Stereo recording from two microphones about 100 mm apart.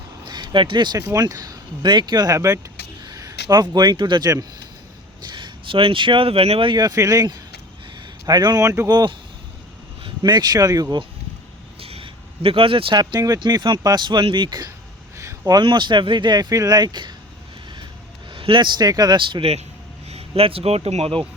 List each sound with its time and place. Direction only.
0.3 s speech: 50° right (ahead or behind)
1.1 s speech: 35° right (ahead or behind)
5.2 s speech: 50° right (ahead or behind); by 6.7 s 70° right (ahead or behind)
6.7 s speech: 40° right (ahead or behind)
10.2 s speech: 45° right (ahead or behind)
11.8 s speech: 70° right (ahead or behind); by 13.4 s 35° right (ahead or behind)
13.4 s speech: 50° right (ahead or behind)
15.2 s a sound: 30° right (ahead or behind)
15.5 s speech: 50° right (ahead or behind)
18.3 s speech: 60° right (ahead or behind); by 21.2 s 85° right